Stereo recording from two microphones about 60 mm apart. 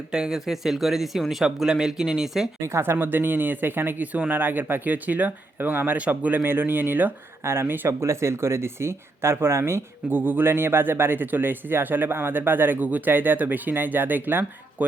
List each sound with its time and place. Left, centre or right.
0.1 s speech: centre
2.6 s speech: right
7.4 s speech: right
7.9 s speech: right
10.1 s speech: right